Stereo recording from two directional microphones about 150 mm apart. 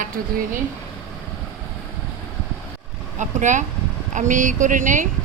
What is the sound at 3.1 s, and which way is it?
Speech, 55° right (ahead or behind).